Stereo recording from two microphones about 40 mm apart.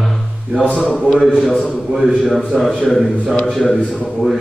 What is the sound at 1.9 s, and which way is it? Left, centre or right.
Speech, centre.